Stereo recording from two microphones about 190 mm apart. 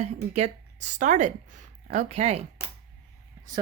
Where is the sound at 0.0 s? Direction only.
35° right (ahead or behind).